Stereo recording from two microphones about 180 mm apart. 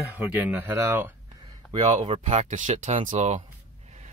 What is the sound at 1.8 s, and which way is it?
Speech, 40° right (ahead or behind).